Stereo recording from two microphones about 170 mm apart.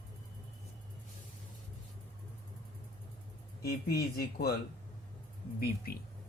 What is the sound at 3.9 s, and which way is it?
Speech, 65° left (ahead or behind).